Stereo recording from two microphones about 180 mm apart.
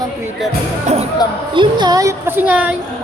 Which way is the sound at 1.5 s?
25° right (ahead or behind).